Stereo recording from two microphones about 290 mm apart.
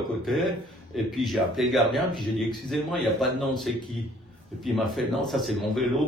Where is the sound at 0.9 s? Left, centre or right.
Centre.